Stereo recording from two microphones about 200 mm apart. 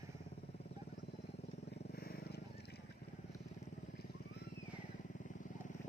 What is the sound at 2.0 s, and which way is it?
Vehicle, 50° left (ahead or behind).